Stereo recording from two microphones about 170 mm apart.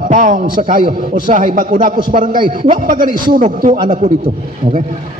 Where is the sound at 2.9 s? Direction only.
55° right (ahead or behind).